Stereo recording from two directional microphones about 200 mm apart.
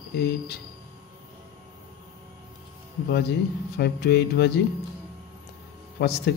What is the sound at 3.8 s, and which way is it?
Speech, 55° left (ahead or behind).